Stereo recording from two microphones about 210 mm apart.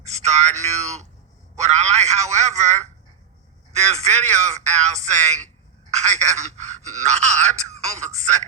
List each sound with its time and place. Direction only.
0.1 s a man's voice: 30° right (ahead or behind)